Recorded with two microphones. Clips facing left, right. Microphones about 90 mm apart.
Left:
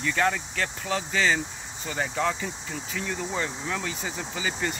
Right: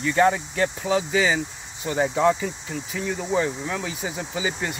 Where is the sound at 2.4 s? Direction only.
5° right (ahead or behind).